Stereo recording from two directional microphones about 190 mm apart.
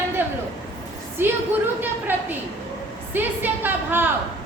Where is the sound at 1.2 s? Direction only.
10° right (ahead or behind).